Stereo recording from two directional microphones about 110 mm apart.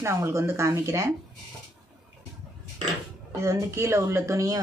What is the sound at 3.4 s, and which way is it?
Speech, 25° right (ahead or behind).